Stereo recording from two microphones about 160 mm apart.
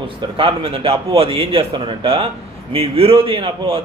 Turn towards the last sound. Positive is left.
turn(degrees=-35)  # may be behind; listen again after turning